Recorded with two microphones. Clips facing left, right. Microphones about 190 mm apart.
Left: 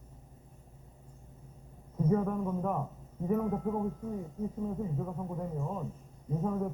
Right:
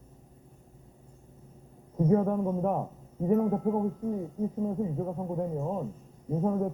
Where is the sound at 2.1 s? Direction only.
35° right (ahead or behind).